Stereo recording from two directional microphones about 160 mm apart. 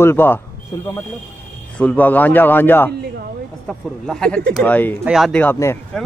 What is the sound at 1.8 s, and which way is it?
Speech, 10° left (ahead or behind).